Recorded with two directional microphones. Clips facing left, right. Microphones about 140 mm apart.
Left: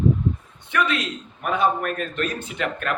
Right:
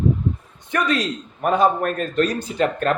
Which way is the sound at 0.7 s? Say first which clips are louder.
Right 2 dB; 40° right (ahead or behind).